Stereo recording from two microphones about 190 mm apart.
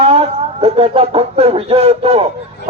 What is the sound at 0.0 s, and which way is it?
A man's voice, 30° right (ahead or behind).